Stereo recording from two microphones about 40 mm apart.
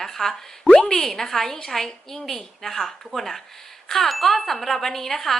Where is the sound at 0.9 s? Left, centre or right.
Centre.